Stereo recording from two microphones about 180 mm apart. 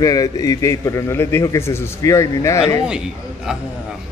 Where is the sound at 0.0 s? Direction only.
20° left (ahead or behind).